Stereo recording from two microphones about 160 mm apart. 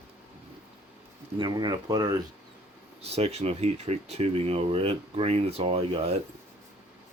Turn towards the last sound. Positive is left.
turn(degrees=-35)  # may be behind; listen again after turning